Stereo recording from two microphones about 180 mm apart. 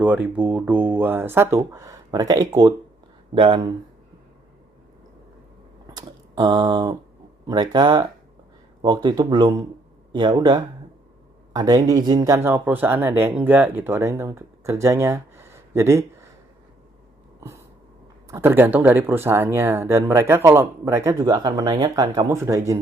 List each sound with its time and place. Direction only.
0.0 s speech: 10° right (ahead or behind); by 3.7 s 25° right (ahead or behind)
5.9 s speech: 20° right (ahead or behind)
18.3 s speech: 15° right (ahead or behind)